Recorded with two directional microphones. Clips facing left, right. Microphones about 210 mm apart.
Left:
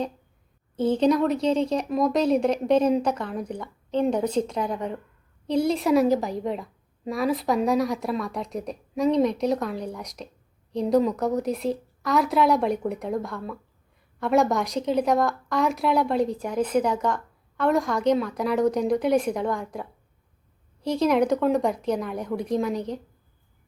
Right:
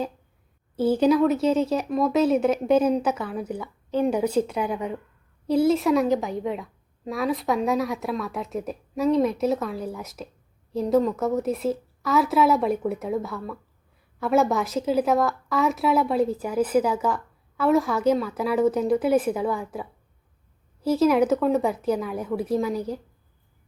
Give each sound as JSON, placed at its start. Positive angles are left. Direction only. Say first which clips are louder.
{"t": 0.8, "sound": "a woman's voice", "louder": "right 2 dB", "side_deg": -5}